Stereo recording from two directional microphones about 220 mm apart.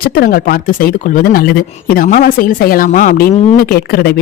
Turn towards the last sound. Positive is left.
turn(degrees=45)  # may be behind; listen again after turning